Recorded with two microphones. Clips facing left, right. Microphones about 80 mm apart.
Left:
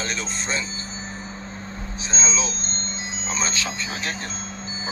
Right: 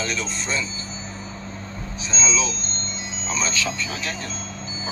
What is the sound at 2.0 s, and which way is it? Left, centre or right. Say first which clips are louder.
Speech: right 2 dB; left.